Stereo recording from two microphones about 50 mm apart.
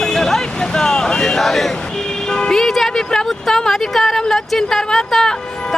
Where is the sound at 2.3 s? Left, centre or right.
Centre.